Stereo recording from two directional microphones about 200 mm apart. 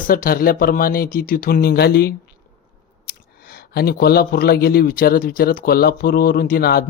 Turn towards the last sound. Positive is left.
turn(degrees=50)  # may be behind; listen again after turning